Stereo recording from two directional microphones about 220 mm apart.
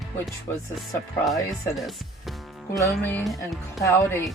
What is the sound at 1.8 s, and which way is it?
Music, centre (ahead or behind).